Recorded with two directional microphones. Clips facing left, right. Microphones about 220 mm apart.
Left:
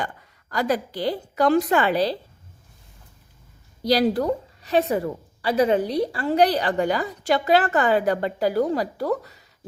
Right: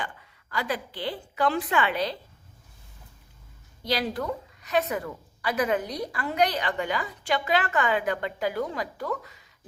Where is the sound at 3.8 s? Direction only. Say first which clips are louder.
Left 9 dB; 40° left (ahead or behind).